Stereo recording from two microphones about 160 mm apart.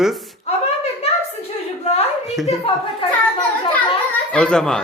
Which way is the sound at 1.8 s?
40° left (ahead or behind).